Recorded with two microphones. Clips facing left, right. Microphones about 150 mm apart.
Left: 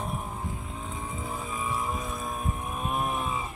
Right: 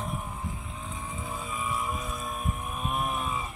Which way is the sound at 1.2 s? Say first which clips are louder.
Even; 30° left (ahead or behind).